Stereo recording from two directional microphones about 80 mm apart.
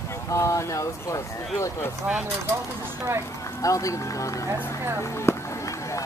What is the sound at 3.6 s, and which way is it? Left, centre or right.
Speech, left.